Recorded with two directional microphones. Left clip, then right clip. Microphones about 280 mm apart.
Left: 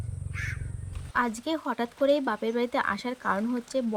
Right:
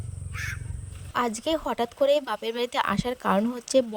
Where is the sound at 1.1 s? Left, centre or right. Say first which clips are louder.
Right 2 dB; right.